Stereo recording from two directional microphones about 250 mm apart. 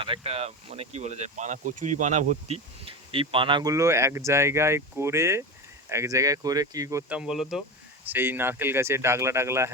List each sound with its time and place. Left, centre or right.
0.0 s speech: right